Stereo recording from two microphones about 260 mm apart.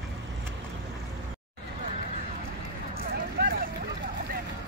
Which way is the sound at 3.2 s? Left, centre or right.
Right.